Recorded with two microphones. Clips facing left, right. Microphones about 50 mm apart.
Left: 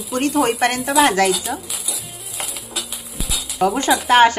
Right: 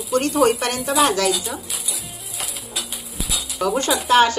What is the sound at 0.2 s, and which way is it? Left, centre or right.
A woman's voice, left.